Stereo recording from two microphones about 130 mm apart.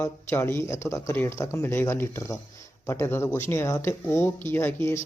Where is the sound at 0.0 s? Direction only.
20° left (ahead or behind).